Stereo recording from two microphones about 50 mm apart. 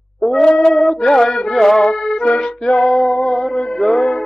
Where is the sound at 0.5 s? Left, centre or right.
Centre.